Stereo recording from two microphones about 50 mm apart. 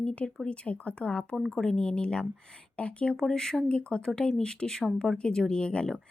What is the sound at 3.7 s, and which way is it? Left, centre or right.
Speech, left.